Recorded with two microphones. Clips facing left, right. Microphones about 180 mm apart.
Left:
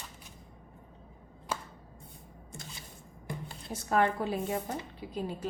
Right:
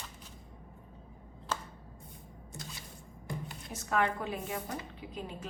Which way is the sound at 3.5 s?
30° left (ahead or behind).